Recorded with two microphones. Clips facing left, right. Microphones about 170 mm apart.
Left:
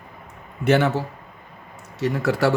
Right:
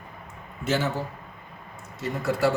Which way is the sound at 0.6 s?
65° left (ahead or behind).